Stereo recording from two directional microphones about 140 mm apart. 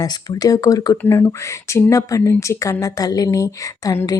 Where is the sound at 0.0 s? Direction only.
25° left (ahead or behind).